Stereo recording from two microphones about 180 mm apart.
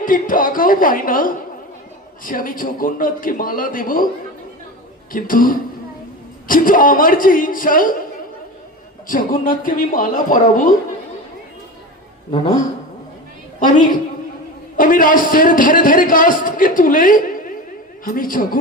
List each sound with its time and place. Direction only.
0.0 s a man's voice: 50° left (ahead or behind)
5.1 s a man's voice: 50° left (ahead or behind)
9.0 s a man's voice: 50° left (ahead or behind)
13.6 s a man's voice: 45° left (ahead or behind)